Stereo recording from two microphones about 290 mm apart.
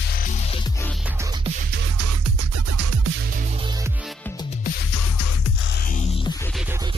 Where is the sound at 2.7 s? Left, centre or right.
Right.